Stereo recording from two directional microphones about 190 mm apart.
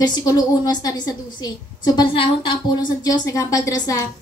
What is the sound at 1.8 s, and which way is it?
A woman's voice, 25° left (ahead or behind).